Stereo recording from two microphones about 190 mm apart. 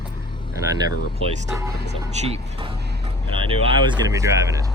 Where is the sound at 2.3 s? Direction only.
30° right (ahead or behind).